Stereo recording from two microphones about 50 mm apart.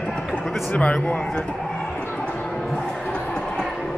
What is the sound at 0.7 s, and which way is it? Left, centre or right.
Speech, left.